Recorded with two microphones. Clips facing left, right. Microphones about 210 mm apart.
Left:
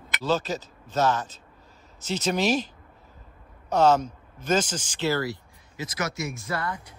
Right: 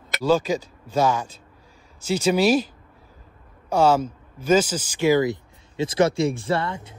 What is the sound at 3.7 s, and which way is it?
Speech, 10° right (ahead or behind).